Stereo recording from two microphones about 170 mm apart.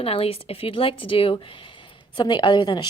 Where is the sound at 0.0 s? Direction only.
35° left (ahead or behind).